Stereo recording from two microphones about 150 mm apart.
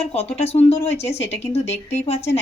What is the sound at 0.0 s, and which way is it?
Speech, 45° left (ahead or behind).